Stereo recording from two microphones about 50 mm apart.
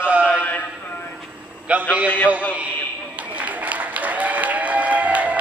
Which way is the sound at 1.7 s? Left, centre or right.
Right.